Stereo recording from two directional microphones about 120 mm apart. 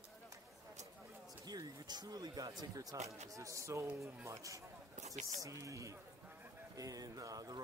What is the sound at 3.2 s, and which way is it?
Speech, 25° right (ahead or behind).